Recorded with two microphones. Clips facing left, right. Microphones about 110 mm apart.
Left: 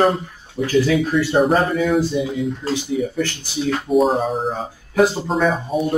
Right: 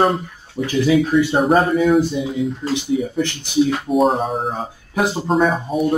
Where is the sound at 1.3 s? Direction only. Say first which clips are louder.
Right 1 dB; centre (ahead or behind).